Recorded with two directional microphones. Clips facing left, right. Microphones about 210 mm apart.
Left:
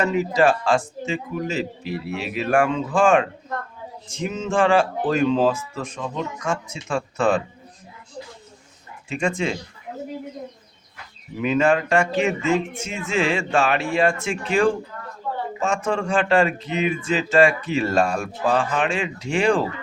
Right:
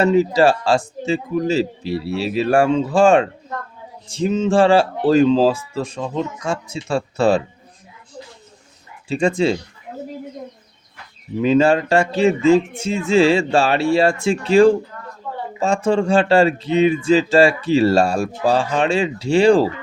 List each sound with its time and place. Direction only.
0.0 s speech: 35° right (ahead or behind)
9.0 s speech: 35° right (ahead or behind)
11.3 s speech: 30° right (ahead or behind)